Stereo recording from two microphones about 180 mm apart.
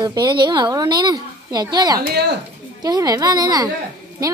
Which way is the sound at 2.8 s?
20° right (ahead or behind).